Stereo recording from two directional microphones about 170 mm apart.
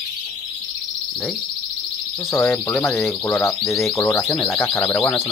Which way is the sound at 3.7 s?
Centre (ahead or behind).